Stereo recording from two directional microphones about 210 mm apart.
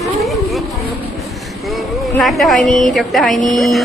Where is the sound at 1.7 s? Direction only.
Centre (ahead or behind).